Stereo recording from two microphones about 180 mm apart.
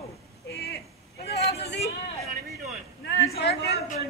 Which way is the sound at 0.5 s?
65° left (ahead or behind).